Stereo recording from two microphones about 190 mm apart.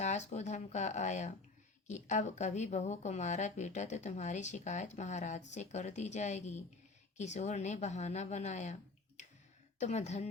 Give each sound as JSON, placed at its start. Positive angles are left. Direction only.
{"t": 0.0, "sound": "a woman's voice", "side_deg": 35}
{"t": 9.8, "sound": "a woman's voice", "side_deg": 35}